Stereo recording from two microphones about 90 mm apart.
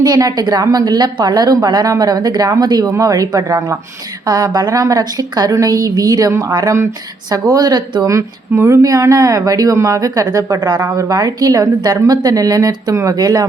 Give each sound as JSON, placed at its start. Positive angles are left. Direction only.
{"t": 0.0, "sound": "a woman's voice", "side_deg": -45}
{"t": 8.0, "sound": "a woman's voice", "side_deg": -35}